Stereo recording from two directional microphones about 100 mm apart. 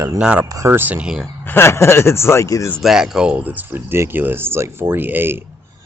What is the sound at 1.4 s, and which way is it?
Speech, 25° left (ahead or behind).